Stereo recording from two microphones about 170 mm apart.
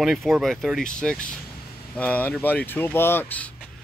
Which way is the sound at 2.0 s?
10° left (ahead or behind).